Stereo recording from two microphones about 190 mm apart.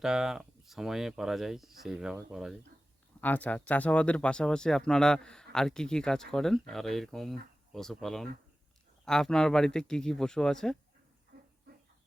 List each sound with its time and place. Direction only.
0.0 s speech: 5° right (ahead or behind)
3.2 s speech: 10° left (ahead or behind)
11.3 s a sound: 60° right (ahead or behind)